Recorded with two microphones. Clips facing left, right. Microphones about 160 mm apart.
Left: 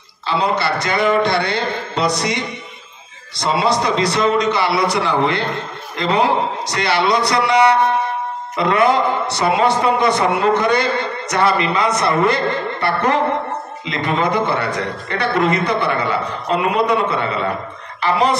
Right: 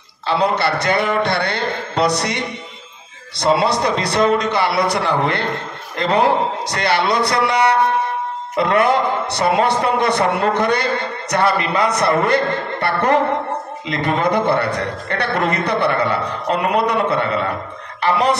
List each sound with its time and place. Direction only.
0.3 s speech: 60° right (ahead or behind)
8.5 s speech: 50° right (ahead or behind)